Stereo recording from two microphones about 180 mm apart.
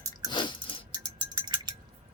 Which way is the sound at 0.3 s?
25° left (ahead or behind).